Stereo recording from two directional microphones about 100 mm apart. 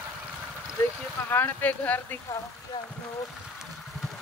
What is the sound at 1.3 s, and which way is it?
Speech, 20° left (ahead or behind).